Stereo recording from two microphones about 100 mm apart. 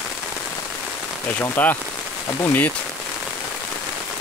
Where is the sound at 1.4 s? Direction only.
20° left (ahead or behind).